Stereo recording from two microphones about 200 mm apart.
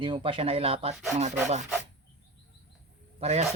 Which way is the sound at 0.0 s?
25° right (ahead or behind).